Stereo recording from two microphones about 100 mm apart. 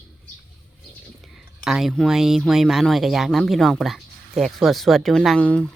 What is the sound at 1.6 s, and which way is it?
Speech, 5° right (ahead or behind).